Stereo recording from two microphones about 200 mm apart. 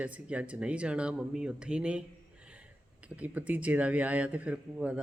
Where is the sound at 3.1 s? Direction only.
5° right (ahead or behind).